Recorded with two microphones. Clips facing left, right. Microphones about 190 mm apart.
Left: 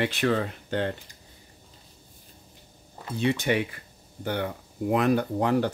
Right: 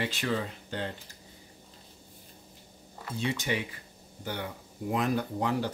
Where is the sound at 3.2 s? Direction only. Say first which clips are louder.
Left 7 dB; 60° left (ahead or behind).